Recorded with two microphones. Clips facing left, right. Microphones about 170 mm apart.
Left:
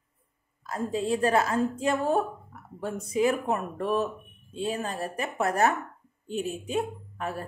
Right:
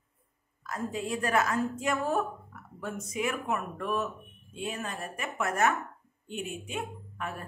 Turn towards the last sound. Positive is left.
turn(degrees=35)  # may be behind; listen again after turning